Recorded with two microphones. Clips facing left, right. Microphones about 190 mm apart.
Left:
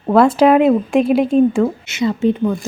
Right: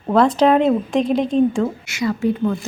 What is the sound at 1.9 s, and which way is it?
Speech, 20° left (ahead or behind).